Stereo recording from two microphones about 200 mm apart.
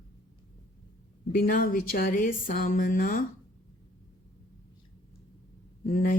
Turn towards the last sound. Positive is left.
turn(degrees=45)  # may be behind; listen again after turning